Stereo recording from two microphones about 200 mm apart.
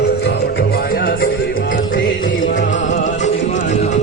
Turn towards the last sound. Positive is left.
turn(degrees=40)  # may be behind; listen again after turning